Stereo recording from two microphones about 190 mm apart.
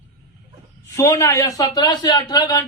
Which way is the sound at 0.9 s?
15° left (ahead or behind).